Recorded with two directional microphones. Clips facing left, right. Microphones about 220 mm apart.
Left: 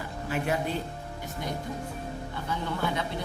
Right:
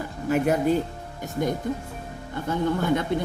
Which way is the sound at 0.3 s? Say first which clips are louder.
Right 8 dB; 40° right (ahead or behind).